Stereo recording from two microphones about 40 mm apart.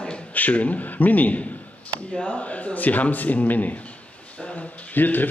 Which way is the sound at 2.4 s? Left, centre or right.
Left.